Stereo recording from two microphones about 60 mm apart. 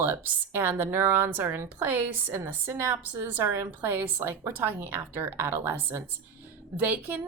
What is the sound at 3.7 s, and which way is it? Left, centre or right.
A woman's voice, right.